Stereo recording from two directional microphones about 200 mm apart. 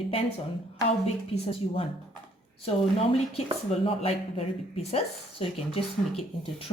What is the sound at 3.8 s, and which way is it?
A woman's voice, 30° left (ahead or behind).